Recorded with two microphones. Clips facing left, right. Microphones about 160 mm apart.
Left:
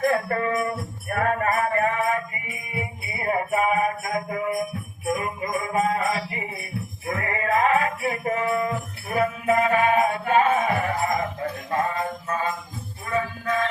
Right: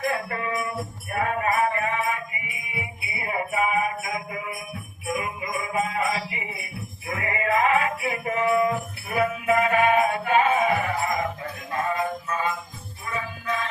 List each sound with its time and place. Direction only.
0.0 s music: 45° left (ahead or behind)
12.3 s jingle bell: 45° left (ahead or behind)
13.1 s music: 45° left (ahead or behind)